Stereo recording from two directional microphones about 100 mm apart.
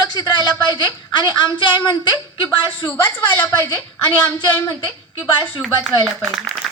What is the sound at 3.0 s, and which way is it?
A woman's voice, 20° left (ahead or behind).